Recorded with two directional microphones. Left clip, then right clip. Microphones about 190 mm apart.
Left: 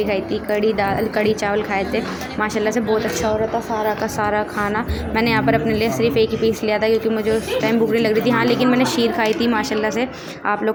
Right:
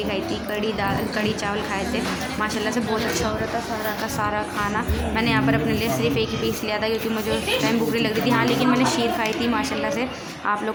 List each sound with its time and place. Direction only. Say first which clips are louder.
0.1 s a woman's voice: left 6 dB; 25° left (ahead or behind)
4.2 s a woman's voice: left 3 dB; 20° left (ahead or behind)